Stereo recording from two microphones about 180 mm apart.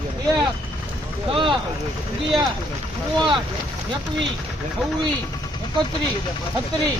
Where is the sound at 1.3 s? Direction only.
25° right (ahead or behind).